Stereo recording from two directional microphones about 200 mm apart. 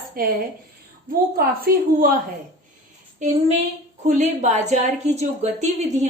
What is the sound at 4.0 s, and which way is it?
A woman's voice, 35° right (ahead or behind).